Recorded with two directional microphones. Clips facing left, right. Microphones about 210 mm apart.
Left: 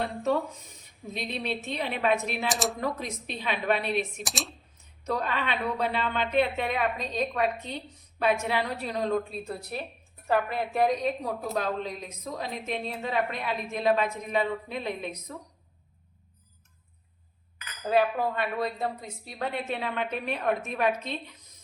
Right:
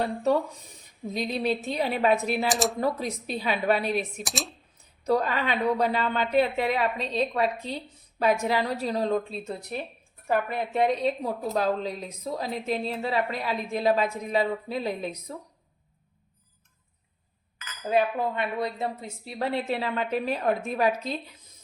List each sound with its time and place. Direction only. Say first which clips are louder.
1.1 s a woman's voice: right 5 dB; 35° right (ahead or behind)
2.5 s speech: right 2 dB; centre (ahead or behind)
2.8 s a woman's voice: right 4 dB; 35° right (ahead or behind)
4.2 s speech: right 2 dB; centre (ahead or behind)
5.0 s a woman's voice: right 5 dB; 40° right (ahead or behind)
17.8 s a woman's voice: even; 20° right (ahead or behind); by 21.2 s 35° right (ahead or behind)